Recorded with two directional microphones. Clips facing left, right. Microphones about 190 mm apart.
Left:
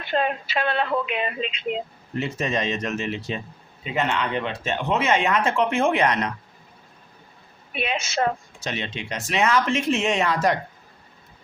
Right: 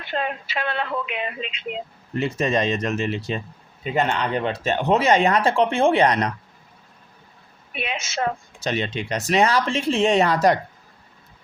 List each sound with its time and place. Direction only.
0.1 s a woman's voice: 35° left (ahead or behind)
2.4 s speech: 35° right (ahead or behind)
7.8 s a woman's voice: 35° left (ahead or behind)
8.6 s speech: 40° right (ahead or behind)